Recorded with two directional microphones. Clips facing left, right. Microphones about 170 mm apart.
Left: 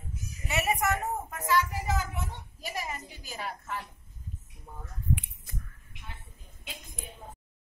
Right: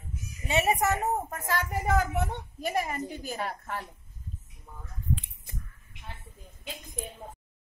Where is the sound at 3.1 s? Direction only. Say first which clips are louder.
Right 5 dB; 55° right (ahead or behind).